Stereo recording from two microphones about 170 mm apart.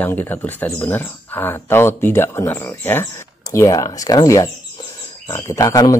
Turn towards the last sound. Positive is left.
turn(degrees=20)  # may be behind; listen again after turning